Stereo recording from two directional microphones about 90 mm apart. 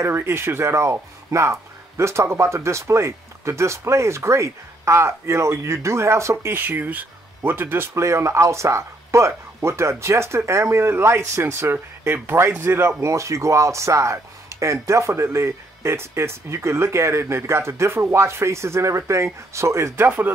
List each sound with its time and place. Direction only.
0.0 s speech: 30° right (ahead or behind)
20.1 s speech: 20° right (ahead or behind)